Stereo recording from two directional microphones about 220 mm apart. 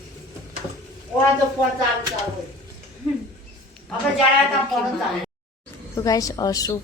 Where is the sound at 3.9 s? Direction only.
5° left (ahead or behind).